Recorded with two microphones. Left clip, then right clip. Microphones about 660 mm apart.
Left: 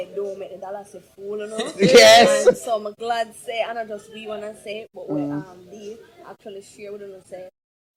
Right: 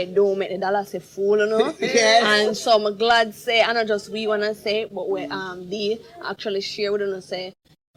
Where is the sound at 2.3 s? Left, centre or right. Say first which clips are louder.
Even; right.